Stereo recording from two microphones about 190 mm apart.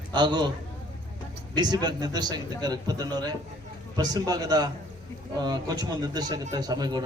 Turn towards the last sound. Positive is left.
turn(degrees=-20)  # may be behind; listen again after turning